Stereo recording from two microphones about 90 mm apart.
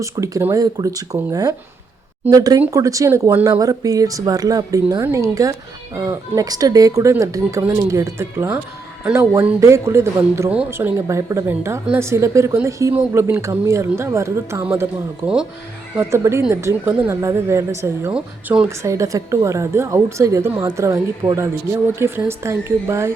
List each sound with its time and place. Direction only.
0.0 s a woman's voice: 35° right (ahead or behind)
3.1 s a woman's voice: 25° right (ahead or behind)
3.4 s a woman's voice: 40° right (ahead or behind)
18.1 s speech: 10° right (ahead or behind)
18.7 s a woman's voice: 35° right (ahead or behind)